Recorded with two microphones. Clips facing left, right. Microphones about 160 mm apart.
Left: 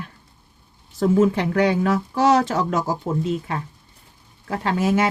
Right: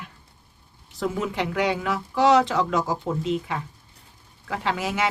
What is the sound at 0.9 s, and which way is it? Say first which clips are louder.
Speech: left 9 dB; 45° left (ahead or behind).